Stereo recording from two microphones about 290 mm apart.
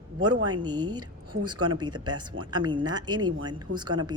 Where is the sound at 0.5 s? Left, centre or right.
Centre.